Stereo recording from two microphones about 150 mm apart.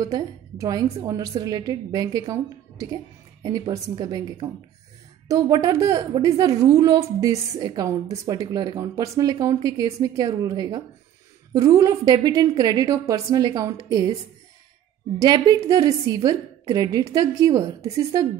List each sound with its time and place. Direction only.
0.0 s a woman's voice: 25° right (ahead or behind)
3.4 s a woman's voice: 25° right (ahead or behind)
15.1 s a woman's voice: 30° right (ahead or behind)